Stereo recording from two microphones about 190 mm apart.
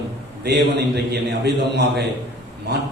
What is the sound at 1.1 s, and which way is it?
Speech, 60° right (ahead or behind).